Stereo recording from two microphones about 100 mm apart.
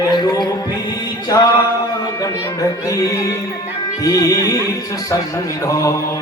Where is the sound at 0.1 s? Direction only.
45° left (ahead or behind).